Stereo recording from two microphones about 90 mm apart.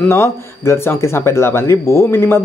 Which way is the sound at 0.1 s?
30° left (ahead or behind).